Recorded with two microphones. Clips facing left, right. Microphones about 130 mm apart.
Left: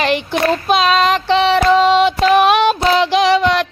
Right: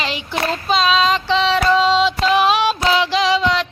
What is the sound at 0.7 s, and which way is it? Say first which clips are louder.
Child singing: left 1 dB; 55° left (ahead or behind).